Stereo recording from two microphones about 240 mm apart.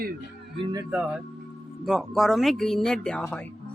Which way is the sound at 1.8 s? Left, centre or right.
Centre.